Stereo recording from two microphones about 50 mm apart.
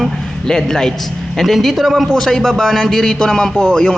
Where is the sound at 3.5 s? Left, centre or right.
Centre.